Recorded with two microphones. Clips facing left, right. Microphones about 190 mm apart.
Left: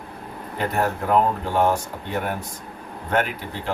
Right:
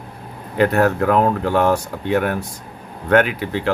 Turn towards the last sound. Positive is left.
turn(degrees=-75)  # may be behind; listen again after turning